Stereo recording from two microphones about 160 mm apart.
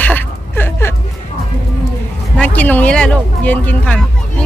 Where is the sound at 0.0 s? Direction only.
10° left (ahead or behind).